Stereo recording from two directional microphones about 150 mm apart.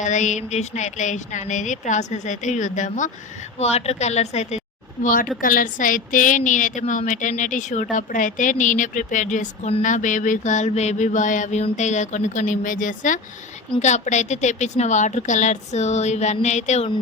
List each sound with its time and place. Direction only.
0.0 s a woman's voice: 55° left (ahead or behind)
3.6 s a woman's voice: 45° left (ahead or behind)
5.4 s a woman's voice: 65° left (ahead or behind); by 16.9 s 50° left (ahead or behind)